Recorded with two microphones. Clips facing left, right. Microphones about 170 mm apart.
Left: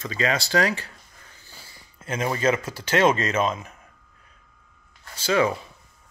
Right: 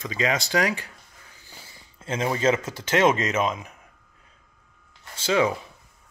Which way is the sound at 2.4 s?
20° right (ahead or behind).